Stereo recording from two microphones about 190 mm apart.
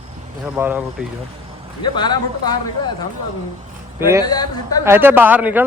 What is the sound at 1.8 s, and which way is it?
A man's voice, 25° left (ahead or behind).